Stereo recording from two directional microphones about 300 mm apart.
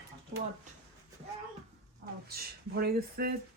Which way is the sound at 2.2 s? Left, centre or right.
Right.